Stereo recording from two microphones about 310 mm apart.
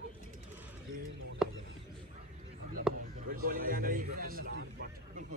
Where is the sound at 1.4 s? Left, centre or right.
Centre.